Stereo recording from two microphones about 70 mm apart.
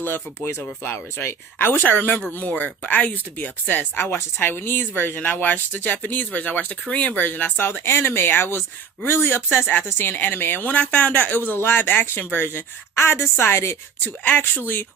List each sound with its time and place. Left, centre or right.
0.0 s speech: left
14.3 s speech: left